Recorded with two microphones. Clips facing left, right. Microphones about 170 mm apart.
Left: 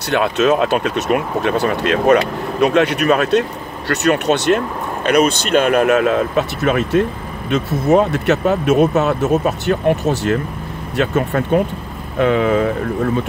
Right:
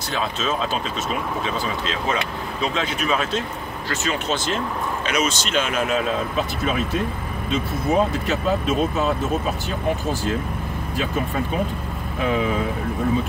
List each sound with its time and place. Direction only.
0.1 s speech: 70° left (ahead or behind)